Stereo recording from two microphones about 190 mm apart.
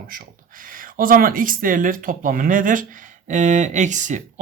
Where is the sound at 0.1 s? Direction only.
45° right (ahead or behind).